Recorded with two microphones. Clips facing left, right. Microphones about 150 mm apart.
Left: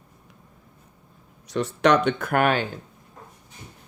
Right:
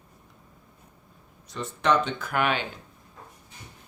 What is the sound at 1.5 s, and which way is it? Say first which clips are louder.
Speech: left 5 dB; 75° left (ahead or behind).